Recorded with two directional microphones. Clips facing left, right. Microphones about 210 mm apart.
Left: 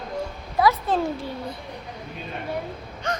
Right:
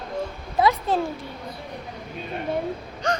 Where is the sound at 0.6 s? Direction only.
15° right (ahead or behind).